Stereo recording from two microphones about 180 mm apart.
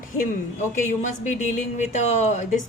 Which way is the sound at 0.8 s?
40° left (ahead or behind).